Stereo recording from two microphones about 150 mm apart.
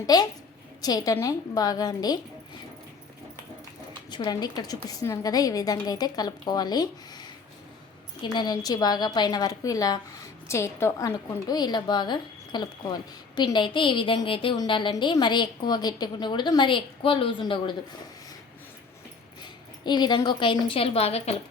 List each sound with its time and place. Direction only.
0.0 s a woman's voice: 25° left (ahead or behind)
4.1 s a woman's voice: 30° left (ahead or behind)
19.4 s a woman's voice: 30° left (ahead or behind)